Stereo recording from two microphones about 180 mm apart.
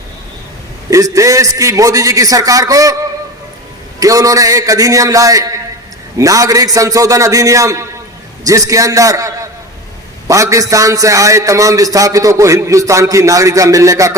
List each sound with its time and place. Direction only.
0.9 s a man's voice: 20° right (ahead or behind)
4.0 s a man's voice: 20° right (ahead or behind)